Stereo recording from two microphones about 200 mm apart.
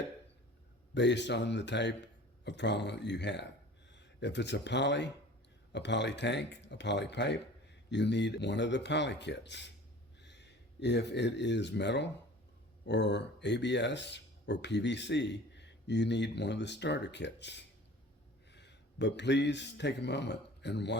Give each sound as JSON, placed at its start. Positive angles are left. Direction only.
{"t": 0.9, "sound": "speech", "side_deg": 60}